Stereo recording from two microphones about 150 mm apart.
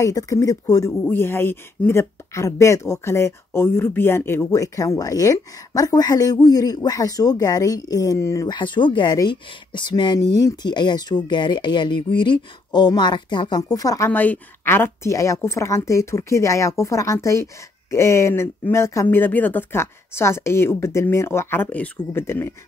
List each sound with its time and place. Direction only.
0.0 s speech: 25° left (ahead or behind)